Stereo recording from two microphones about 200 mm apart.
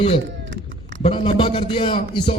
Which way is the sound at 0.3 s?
65° right (ahead or behind).